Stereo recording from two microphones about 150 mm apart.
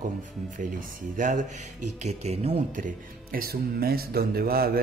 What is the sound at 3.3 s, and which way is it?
Speech, 80° right.